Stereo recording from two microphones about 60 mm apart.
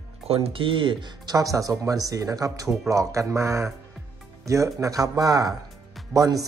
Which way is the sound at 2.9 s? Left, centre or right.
Right.